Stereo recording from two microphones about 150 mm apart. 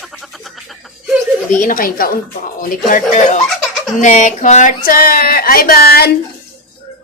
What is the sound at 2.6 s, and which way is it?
Speech, 60° left (ahead or behind).